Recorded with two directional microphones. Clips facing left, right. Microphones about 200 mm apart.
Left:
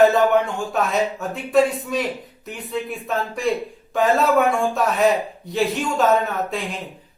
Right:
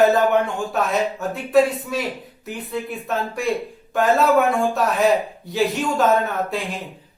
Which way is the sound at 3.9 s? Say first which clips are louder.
Right 1 dB; centre (ahead or behind).